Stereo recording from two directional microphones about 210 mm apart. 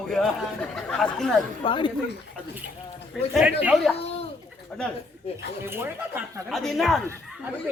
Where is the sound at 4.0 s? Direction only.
30° left (ahead or behind).